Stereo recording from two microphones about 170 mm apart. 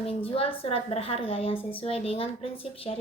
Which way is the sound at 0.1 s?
35° left (ahead or behind).